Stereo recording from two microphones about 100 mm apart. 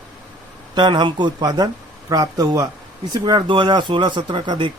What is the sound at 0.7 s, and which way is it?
Speech, 50° right (ahead or behind).